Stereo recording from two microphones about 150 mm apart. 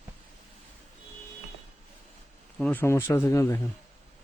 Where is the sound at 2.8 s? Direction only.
15° left (ahead or behind).